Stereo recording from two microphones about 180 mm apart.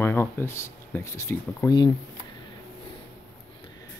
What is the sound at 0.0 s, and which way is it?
Speech, 15° left (ahead or behind).